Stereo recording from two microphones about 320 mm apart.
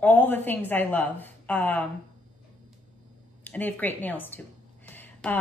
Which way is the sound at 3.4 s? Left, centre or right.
Centre.